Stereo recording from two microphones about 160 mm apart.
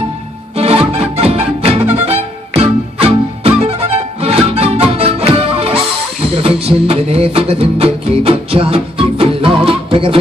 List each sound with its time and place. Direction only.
0.6 s music: 40° right (ahead or behind)